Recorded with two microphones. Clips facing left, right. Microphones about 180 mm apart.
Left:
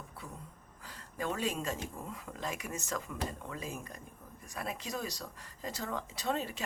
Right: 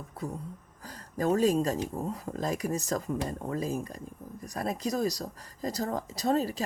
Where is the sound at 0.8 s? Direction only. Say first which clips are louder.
Right 8 dB; 40° right (ahead or behind).